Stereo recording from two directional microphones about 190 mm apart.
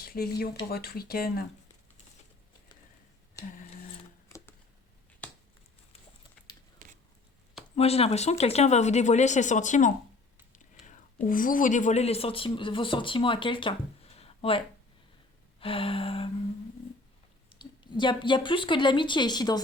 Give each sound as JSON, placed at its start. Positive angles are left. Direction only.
{"t": 0.0, "sound": "speech", "side_deg": 55}
{"t": 6.8, "sound": "a sound", "side_deg": -40}
{"t": 7.8, "sound": "speech", "side_deg": 30}
{"t": 15.6, "sound": "a woman's voice", "side_deg": 30}
{"t": 17.6, "sound": "a woman's voice", "side_deg": 25}